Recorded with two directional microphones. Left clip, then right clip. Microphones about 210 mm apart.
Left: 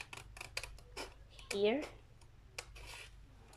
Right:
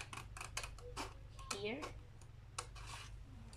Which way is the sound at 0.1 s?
Centre (ahead or behind).